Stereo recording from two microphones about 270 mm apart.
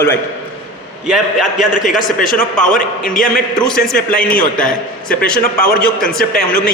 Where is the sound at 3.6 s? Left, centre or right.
Centre.